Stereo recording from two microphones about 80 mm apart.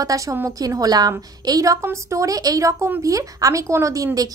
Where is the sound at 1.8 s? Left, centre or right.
Right.